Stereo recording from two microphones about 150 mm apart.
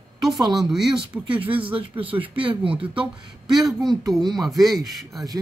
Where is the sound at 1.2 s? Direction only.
35° right (ahead or behind).